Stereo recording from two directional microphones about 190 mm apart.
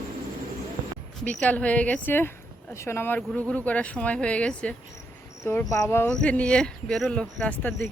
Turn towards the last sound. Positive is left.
turn(degrees=5)  # may be behind; listen again after turning